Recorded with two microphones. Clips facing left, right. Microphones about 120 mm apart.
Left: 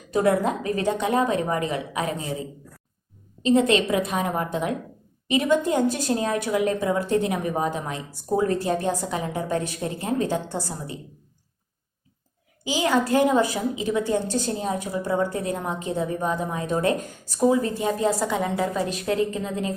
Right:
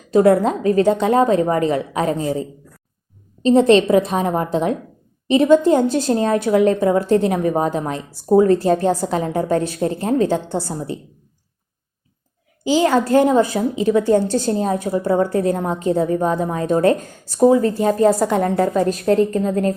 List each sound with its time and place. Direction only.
0.1 s a woman's voice: 35° right (ahead or behind)
12.6 s a woman's voice: 35° right (ahead or behind)
14.5 s a woman's voice: 45° right (ahead or behind)